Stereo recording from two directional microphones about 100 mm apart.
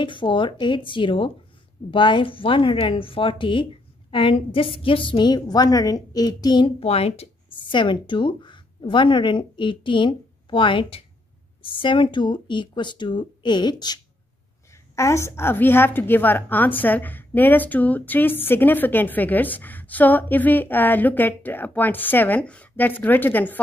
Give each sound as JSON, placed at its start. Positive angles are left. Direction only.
{"t": 0.0, "sound": "a woman's voice", "side_deg": 55}
{"t": 6.8, "sound": "a woman's voice", "side_deg": 90}
{"t": 7.7, "sound": "speech", "side_deg": 55}
{"t": 11.6, "sound": "a woman's voice", "side_deg": 55}
{"t": 15.0, "sound": "a woman's voice", "side_deg": 30}